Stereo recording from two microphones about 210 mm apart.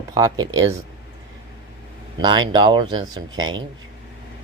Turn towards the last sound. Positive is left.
turn(degrees=-20)  # may be behind; listen again after turning